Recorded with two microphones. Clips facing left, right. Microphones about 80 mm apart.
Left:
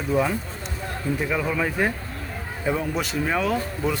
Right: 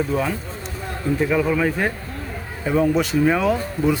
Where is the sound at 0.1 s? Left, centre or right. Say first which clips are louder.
Even; centre.